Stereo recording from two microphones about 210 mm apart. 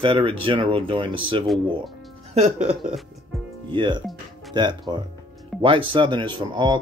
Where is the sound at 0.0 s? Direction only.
25° right (ahead or behind).